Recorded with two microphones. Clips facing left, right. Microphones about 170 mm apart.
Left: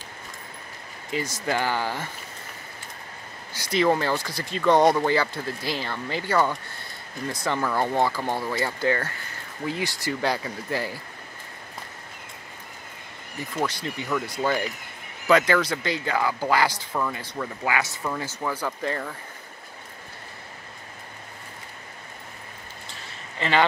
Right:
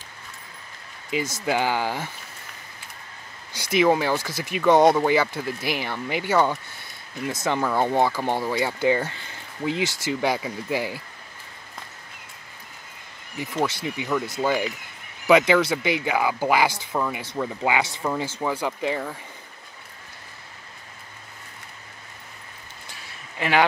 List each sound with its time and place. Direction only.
1.1 s speech: 10° right (ahead or behind)
3.5 s speech: 15° right (ahead or behind)
13.8 s speech: 10° right (ahead or behind)
17.4 s speech: 20° right (ahead or behind)
23.3 s speech: 10° right (ahead or behind)